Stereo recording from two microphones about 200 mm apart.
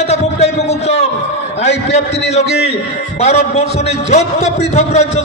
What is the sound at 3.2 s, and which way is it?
A man's voice, 35° left (ahead or behind).